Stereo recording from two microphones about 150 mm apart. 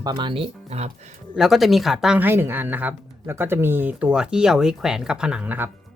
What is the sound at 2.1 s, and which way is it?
Speech, 15° right (ahead or behind).